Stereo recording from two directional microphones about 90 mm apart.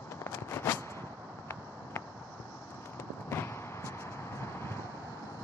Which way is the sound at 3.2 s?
30° left (ahead or behind).